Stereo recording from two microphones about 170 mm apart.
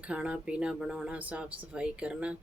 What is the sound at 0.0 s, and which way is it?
Speech, 5° right (ahead or behind).